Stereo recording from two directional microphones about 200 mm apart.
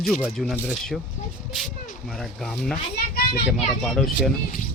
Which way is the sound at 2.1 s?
Centre (ahead or behind).